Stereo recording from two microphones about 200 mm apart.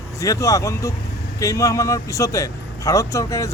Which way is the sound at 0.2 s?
15° left (ahead or behind).